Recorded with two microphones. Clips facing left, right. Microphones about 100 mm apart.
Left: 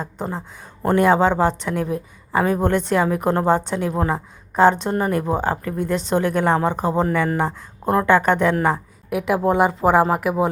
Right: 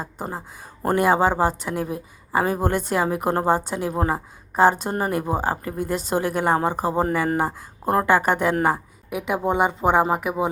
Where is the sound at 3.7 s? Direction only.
20° right (ahead or behind).